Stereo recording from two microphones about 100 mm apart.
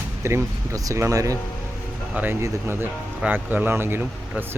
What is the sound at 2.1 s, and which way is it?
Speech, 15° right (ahead or behind).